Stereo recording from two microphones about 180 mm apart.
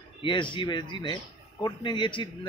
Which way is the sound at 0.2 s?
25° left (ahead or behind).